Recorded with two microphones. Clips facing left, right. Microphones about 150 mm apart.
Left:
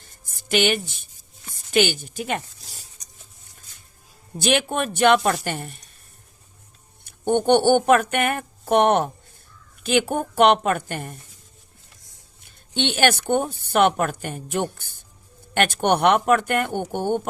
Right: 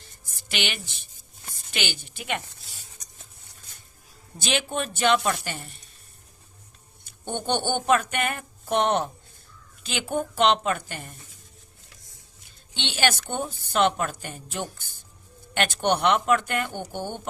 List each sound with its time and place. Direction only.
0.0 s music: 50° left (ahead or behind)
1.7 s speech: 45° left (ahead or behind)
4.4 s speech: 55° left (ahead or behind)
7.0 s speech: 55° left (ahead or behind)
12.5 s a woman's voice: 55° left (ahead or behind)